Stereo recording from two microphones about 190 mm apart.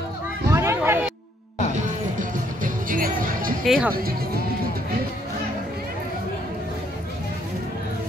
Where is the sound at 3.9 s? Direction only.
50° right (ahead or behind).